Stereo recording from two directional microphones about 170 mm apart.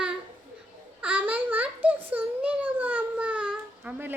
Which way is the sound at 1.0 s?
10° right (ahead or behind).